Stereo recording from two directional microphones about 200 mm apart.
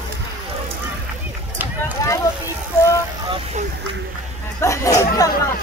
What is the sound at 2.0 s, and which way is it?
Vehicle, 15° left (ahead or behind).